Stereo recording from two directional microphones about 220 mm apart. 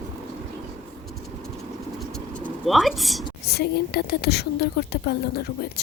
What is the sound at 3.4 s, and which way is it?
A woman's voice, 50° left (ahead or behind).